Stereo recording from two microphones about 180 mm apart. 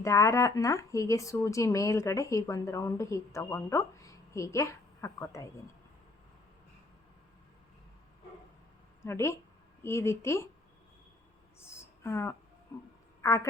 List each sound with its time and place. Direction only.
0.0 s speech: 15° left (ahead or behind)
9.0 s speech: 15° left (ahead or behind)
11.8 s a sound: 15° left (ahead or behind)
13.2 s speech: 15° left (ahead or behind)